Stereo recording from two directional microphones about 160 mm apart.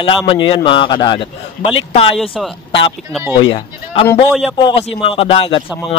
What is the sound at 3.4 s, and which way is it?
A man's voice, 35° left (ahead or behind).